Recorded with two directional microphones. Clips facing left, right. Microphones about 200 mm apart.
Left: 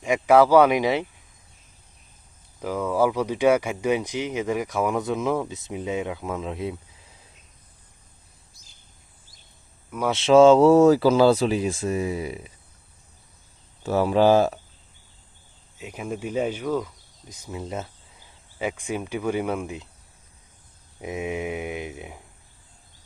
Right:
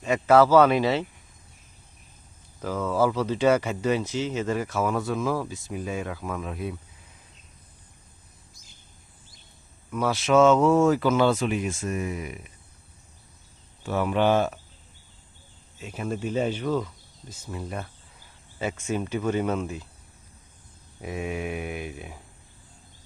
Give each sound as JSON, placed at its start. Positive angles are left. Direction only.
{"t": 0.0, "sound": "speech", "side_deg": 15}
{"t": 2.6, "sound": "speech", "side_deg": 10}
{"t": 10.1, "sound": "speech", "side_deg": 30}
{"t": 13.8, "sound": "speech", "side_deg": 35}
{"t": 15.8, "sound": "speech", "side_deg": 15}
{"t": 21.0, "sound": "speech", "side_deg": 20}